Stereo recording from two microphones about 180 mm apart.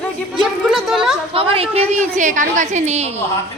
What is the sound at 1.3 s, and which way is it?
A woman's voice, 30° right (ahead or behind).